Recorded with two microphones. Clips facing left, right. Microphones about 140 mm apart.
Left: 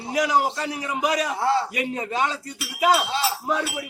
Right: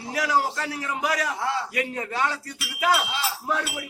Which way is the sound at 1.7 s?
20° left (ahead or behind).